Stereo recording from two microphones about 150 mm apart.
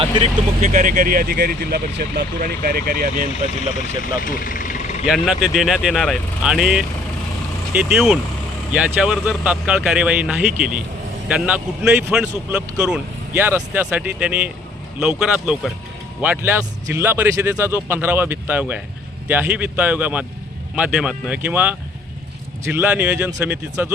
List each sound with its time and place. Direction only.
0.6 s speech: 60° right (ahead or behind); by 3.2 s 75° right (ahead or behind)
3.9 s speech: 70° left (ahead or behind)
5.0 s speech: 5° right (ahead or behind)